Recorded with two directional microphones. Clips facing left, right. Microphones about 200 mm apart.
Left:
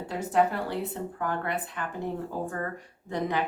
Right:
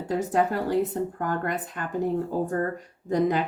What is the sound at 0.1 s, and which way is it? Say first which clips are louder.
A woman's voice: right 2 dB; 45° right (ahead or behind).